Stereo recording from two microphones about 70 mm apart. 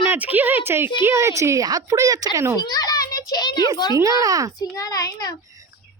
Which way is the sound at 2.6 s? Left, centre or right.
Left.